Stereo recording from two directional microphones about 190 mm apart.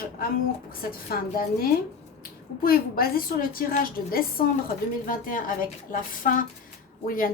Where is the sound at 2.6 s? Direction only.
50° left (ahead or behind).